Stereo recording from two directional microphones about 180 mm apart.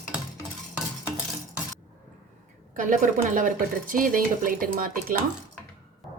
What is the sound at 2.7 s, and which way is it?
A woman's voice, 45° right (ahead or behind).